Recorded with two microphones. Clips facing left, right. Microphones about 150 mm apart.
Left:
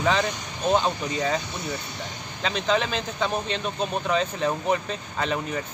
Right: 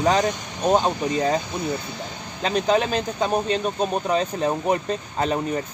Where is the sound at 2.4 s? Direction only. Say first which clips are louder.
Right 4 dB; 40° right (ahead or behind).